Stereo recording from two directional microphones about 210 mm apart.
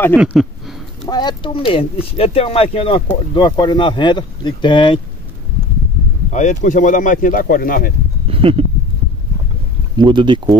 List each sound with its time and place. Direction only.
0.2 s speech: 5° right (ahead or behind)
1.0 s speech: 20° left (ahead or behind)
6.3 s speech: 35° left (ahead or behind)
8.3 s a sound: 25° right (ahead or behind)
9.9 s speech: 20° right (ahead or behind)